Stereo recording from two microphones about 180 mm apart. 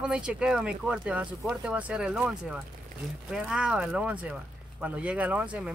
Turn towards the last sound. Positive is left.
turn(degrees=-5)  # may be behind; listen again after turning